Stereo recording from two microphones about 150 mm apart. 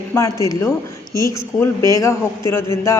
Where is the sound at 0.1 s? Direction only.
20° left (ahead or behind).